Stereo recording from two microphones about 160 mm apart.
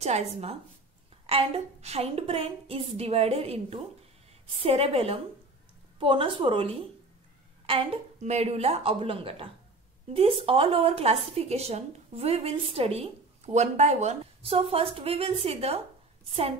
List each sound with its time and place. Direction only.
0.0 s a woman's voice: 40° right (ahead or behind)